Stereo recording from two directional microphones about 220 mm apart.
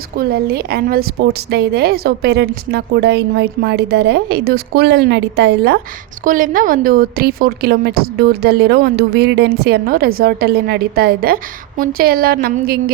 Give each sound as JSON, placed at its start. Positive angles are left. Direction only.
{"t": 0.2, "sound": "a woman's voice", "side_deg": -45}
{"t": 6.2, "sound": "a woman's voice", "side_deg": -40}